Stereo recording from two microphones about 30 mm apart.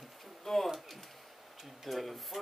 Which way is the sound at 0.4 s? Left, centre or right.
Centre.